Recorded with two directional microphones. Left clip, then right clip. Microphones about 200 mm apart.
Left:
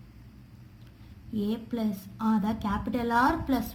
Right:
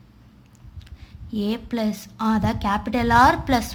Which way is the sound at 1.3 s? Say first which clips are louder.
Right 6 dB; 35° right (ahead or behind).